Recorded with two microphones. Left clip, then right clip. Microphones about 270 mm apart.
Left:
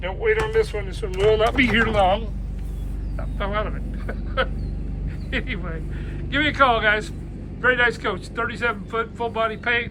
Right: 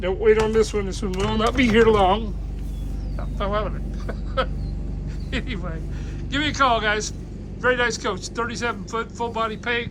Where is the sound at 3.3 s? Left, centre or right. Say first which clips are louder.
Right 1 dB; centre.